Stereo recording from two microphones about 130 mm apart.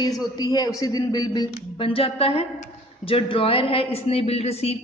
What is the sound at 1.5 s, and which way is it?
A woman's voice, 45° left (ahead or behind).